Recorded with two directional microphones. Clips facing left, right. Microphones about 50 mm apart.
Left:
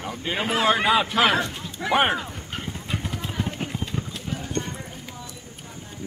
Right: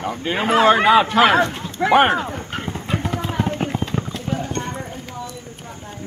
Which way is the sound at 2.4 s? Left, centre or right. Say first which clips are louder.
Right 6 dB; right.